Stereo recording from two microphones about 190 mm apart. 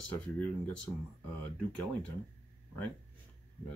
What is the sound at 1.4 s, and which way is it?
Speech, 5° left (ahead or behind).